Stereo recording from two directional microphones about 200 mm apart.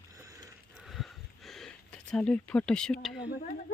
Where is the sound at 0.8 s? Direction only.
Centre (ahead or behind).